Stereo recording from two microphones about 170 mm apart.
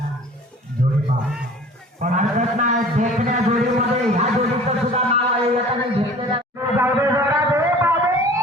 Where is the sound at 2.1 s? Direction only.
45° right (ahead or behind).